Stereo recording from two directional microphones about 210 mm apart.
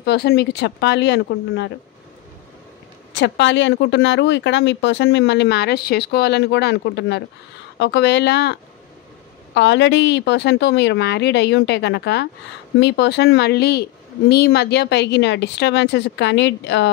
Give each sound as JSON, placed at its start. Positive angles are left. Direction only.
{"t": 0.0, "sound": "speech", "side_deg": 50}
{"t": 3.2, "sound": "speech", "side_deg": 60}